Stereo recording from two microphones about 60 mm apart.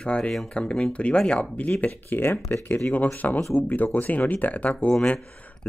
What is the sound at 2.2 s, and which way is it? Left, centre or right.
Speech, left.